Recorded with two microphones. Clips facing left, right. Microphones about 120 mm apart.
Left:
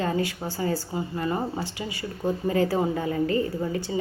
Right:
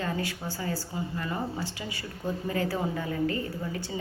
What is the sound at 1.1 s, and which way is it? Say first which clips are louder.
A woman's voice: left 6 dB; 30° left (ahead or behind).